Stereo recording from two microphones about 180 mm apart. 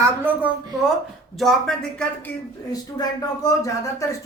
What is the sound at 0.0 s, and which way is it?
Speech, 10° right (ahead or behind).